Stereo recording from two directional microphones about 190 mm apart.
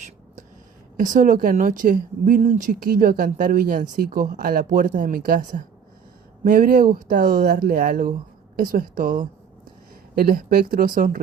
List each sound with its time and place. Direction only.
0.9 s speech: 45° right (ahead or behind)